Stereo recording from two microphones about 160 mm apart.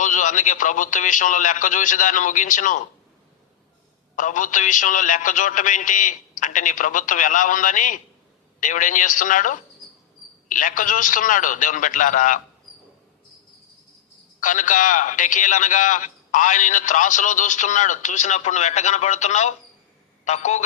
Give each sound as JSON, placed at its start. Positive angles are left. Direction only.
{"t": 0.0, "sound": "a man's voice", "side_deg": 50}
{"t": 4.1, "sound": "a man's voice", "side_deg": 55}
{"t": 14.4, "sound": "a man's voice", "side_deg": 55}